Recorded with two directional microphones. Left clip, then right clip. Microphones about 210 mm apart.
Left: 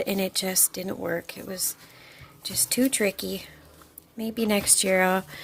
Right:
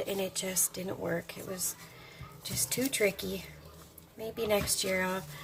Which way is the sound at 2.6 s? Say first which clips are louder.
Left 5 dB; 45° left (ahead or behind).